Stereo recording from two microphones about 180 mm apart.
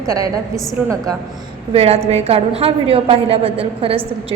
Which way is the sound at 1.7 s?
35° right (ahead or behind).